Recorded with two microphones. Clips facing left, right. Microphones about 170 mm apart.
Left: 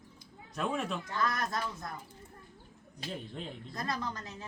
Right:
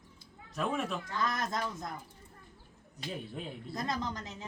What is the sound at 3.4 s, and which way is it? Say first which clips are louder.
Speech: even; 5° right (ahead or behind).